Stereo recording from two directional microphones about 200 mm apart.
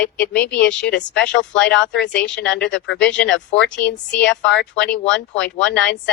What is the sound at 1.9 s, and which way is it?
A woman's voice, 60° left (ahead or behind).